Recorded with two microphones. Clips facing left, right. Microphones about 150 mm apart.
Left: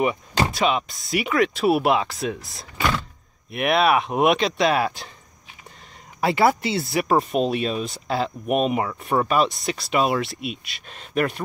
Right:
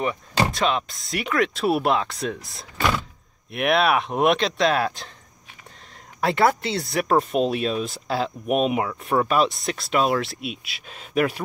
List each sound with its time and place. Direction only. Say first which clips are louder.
0.5 s speech: left 1 dB; 5° left (ahead or behind)
6.2 s speech: left 1 dB; 5° left (ahead or behind)